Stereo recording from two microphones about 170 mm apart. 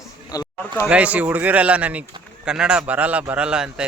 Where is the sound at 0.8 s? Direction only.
5° right (ahead or behind).